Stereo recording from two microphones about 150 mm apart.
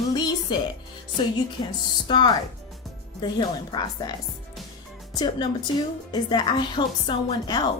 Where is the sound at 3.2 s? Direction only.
30° left (ahead or behind).